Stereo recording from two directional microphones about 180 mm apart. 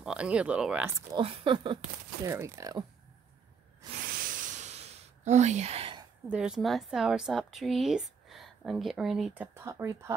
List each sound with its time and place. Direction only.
0.0 s speech: 5° right (ahead or behind)
1.1 s speech: 30° right (ahead or behind)
2.2 s speech: 15° right (ahead or behind)
3.9 s a sound: 50° right (ahead or behind); by 6.0 s 30° right (ahead or behind)
6.2 s a woman's voice: 5° right (ahead or behind)